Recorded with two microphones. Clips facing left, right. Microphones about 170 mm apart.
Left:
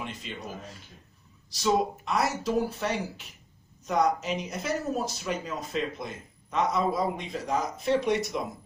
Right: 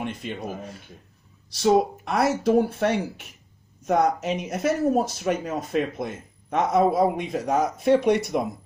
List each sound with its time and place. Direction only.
0.0 s speech: 55° right (ahead or behind)
1.6 s speech: 60° right (ahead or behind)